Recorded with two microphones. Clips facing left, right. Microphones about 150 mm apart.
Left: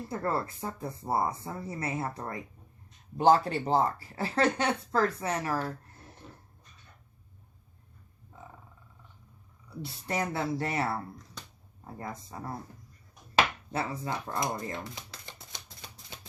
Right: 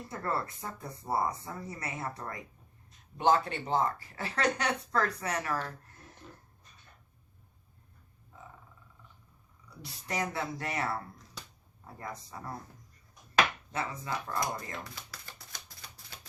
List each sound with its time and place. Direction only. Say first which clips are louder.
0.1 s speech: left 3 dB; 30° left (ahead or behind)
9.8 s speech: left 3 dB; 30° left (ahead or behind)
13.3 s a sound: left 2 dB; 30° left (ahead or behind)